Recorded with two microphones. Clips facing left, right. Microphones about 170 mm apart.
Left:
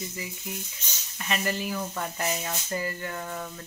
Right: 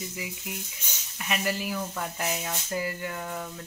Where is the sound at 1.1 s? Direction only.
5° right (ahead or behind).